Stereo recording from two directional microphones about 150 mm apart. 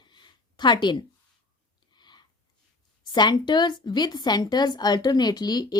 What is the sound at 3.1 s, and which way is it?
Speech, 30° left (ahead or behind).